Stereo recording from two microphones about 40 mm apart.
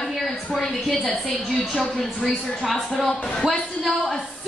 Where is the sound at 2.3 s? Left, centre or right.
Centre.